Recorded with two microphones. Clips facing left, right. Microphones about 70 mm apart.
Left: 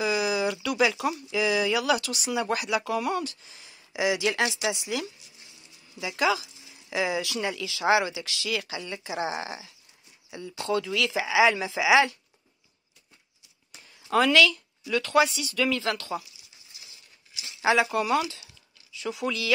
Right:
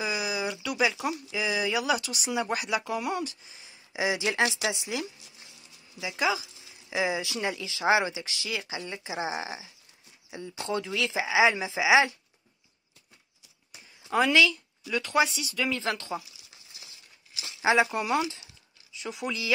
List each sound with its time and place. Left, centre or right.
0.0 s speech: centre
3.9 s speech: right
5.9 s speech: centre
6.9 s speech: right
10.7 s speech: right
14.1 s speech: centre
17.9 s a sound: right
19.2 s speech: right